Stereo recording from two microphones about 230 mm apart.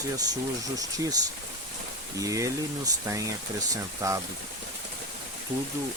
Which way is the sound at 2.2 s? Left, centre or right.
Centre.